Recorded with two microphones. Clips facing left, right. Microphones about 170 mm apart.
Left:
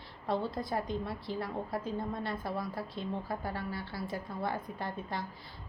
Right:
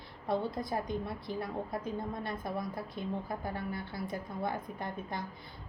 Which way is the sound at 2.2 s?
20° right (ahead or behind).